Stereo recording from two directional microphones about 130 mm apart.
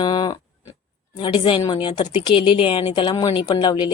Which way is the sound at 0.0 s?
35° left (ahead or behind).